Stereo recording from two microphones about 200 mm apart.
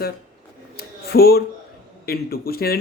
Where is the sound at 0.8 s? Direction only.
50° left (ahead or behind).